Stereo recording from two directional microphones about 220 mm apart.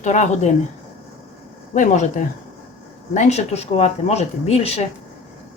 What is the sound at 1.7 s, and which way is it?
Speech, 35° left (ahead or behind).